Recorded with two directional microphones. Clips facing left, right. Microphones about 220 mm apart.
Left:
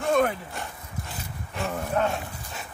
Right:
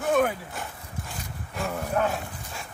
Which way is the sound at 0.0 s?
5° right (ahead or behind).